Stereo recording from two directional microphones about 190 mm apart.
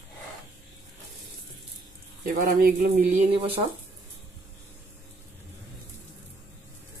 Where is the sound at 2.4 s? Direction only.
50° right (ahead or behind).